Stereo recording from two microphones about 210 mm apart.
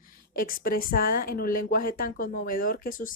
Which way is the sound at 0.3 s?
40° left (ahead or behind).